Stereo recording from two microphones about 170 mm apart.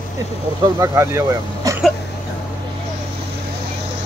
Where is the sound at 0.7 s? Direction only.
20° right (ahead or behind).